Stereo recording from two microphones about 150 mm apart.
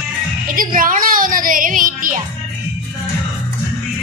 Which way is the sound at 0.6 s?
65° right (ahead or behind).